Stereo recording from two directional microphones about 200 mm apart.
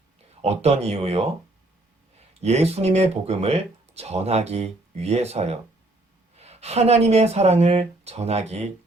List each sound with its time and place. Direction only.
0.4 s speech: 30° right (ahead or behind)
2.4 s speech: 30° right (ahead or behind)